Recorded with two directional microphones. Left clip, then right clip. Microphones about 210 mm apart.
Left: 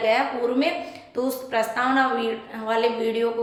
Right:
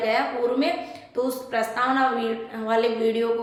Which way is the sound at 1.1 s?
15° left (ahead or behind).